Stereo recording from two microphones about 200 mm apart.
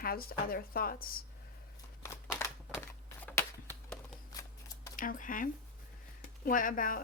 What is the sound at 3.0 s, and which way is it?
Shuffling cards, 10° left (ahead or behind).